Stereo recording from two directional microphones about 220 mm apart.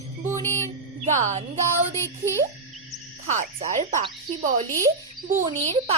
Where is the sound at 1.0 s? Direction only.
35° right (ahead or behind).